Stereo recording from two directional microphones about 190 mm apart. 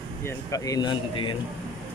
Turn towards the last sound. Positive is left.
turn(degrees=25)  # may be behind; listen again after turning